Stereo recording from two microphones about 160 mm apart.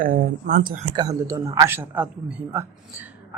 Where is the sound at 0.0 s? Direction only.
60° right (ahead or behind).